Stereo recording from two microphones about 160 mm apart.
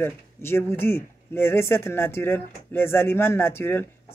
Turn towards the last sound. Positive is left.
turn(degrees=15)  # may be behind; listen again after turning